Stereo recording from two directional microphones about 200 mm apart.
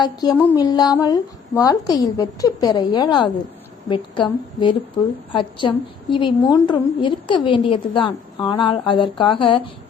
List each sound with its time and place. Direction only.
0.0 s a woman's voice: 20° left (ahead or behind)
0.3 s a sound: 10° left (ahead or behind)
0.6 s a woman's voice: 20° left (ahead or behind)